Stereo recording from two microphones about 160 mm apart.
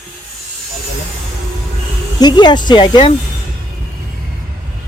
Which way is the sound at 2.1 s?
25° left (ahead or behind).